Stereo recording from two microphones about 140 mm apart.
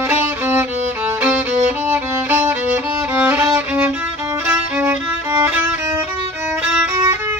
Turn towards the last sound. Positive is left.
turn(degrees=-25)  # may be behind; listen again after turning